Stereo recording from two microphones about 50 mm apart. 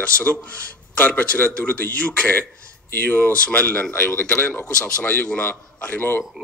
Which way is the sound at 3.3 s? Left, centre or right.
Left.